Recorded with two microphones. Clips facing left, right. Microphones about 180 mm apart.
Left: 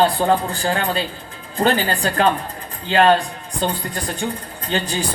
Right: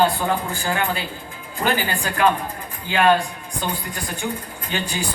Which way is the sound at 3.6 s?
35° left (ahead or behind).